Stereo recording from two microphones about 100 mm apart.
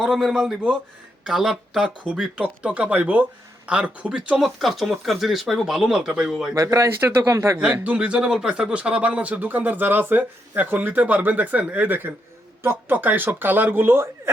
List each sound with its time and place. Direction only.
0.1 s speech: centre (ahead or behind)
6.5 s a man's voice: 35° right (ahead or behind)
7.6 s speech: 15° right (ahead or behind)